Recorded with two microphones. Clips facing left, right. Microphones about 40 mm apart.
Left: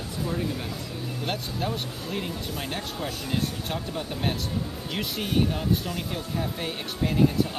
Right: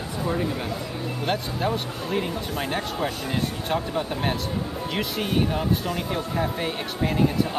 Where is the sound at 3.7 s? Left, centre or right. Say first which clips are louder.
Right 6 dB; centre.